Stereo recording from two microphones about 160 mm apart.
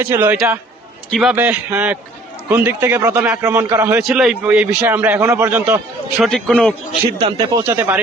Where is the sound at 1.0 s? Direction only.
Centre (ahead or behind).